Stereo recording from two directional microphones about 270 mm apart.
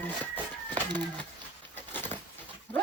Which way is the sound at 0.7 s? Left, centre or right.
Centre.